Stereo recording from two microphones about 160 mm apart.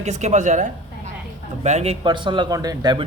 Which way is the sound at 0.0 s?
45° right (ahead or behind).